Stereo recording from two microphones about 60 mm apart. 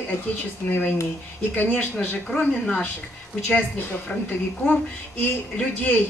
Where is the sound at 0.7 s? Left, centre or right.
Left.